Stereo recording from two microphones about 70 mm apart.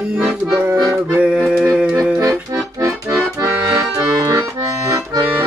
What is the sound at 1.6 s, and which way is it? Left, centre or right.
Music, centre.